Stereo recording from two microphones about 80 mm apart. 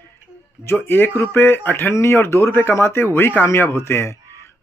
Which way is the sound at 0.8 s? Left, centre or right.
Left.